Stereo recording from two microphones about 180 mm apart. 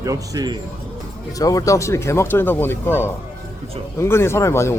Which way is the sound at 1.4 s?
20° left (ahead or behind).